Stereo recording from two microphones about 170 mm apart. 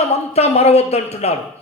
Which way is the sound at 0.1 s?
40° left (ahead or behind).